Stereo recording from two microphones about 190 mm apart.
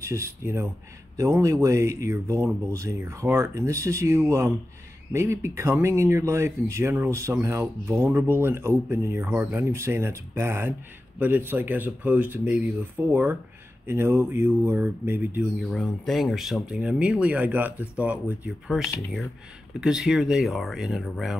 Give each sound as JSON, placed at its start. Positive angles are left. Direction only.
{"t": 0.0, "sound": "speech", "side_deg": -15}
{"t": 15.7, "sound": "speech", "side_deg": 0}